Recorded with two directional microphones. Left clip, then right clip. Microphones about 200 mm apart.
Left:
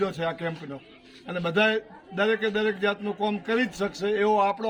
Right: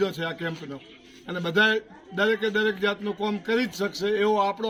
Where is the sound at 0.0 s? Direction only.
15° left (ahead or behind).